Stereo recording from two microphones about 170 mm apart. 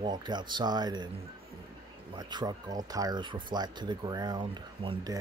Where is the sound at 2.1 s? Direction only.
25° right (ahead or behind).